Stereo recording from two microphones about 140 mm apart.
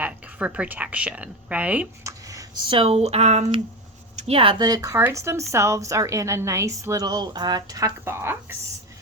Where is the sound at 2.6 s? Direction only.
40° right (ahead or behind).